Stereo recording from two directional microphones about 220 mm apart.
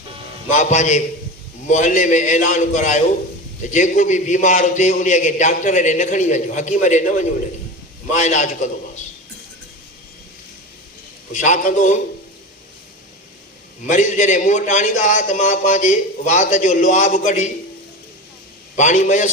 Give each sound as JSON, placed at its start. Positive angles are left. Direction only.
{"t": 0.5, "sound": "a man's voice", "side_deg": 30}
{"t": 11.3, "sound": "a man's voice", "side_deg": 35}
{"t": 13.8, "sound": "a man's voice", "side_deg": 35}
{"t": 18.8, "sound": "a man's voice", "side_deg": 35}